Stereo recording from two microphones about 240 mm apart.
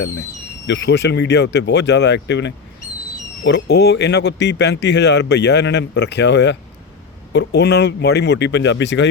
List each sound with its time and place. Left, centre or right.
0.7 s speech: left